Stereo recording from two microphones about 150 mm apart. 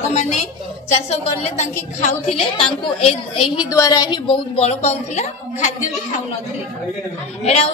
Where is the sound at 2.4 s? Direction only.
40° left (ahead or behind).